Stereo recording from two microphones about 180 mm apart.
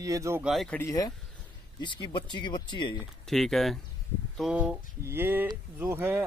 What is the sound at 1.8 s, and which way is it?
Speech, 25° left (ahead or behind).